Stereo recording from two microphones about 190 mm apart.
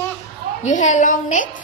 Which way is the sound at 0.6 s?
40° left (ahead or behind).